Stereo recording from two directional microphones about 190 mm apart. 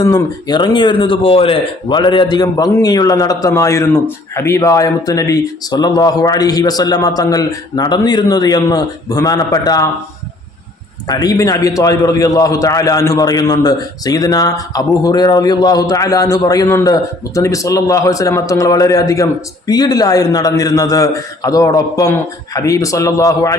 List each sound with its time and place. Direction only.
0.0 s speech: 20° left (ahead or behind)
11.1 s a man's voice: 20° left (ahead or behind)